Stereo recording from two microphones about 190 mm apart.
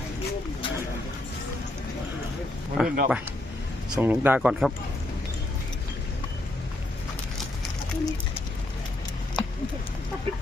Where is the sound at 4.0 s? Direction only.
10° right (ahead or behind).